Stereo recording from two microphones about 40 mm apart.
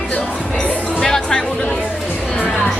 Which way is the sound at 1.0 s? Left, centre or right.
Centre.